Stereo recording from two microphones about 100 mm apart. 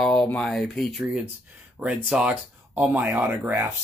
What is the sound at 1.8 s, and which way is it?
Speech, 10° right (ahead or behind).